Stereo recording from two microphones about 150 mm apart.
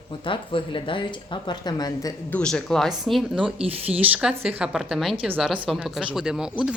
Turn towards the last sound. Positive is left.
turn(degrees=-5)  # may be behind; listen again after turning